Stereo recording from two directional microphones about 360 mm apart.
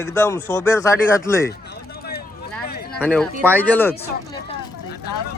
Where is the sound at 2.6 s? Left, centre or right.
Left.